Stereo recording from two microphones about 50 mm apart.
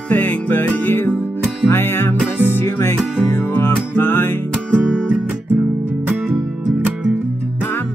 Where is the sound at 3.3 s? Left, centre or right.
Left.